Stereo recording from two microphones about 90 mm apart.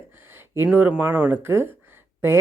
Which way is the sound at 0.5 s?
25° right (ahead or behind).